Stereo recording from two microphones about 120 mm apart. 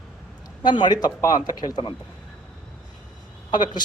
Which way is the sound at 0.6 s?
40° left (ahead or behind).